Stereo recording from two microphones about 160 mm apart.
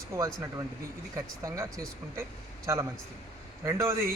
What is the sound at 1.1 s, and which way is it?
Speech, 20° right (ahead or behind).